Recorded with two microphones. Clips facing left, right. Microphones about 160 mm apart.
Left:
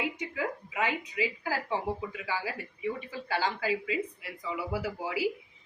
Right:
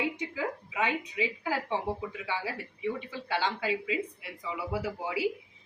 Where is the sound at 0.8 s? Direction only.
25° right (ahead or behind).